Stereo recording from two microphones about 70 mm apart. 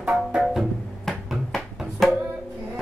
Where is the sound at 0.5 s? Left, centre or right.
Centre.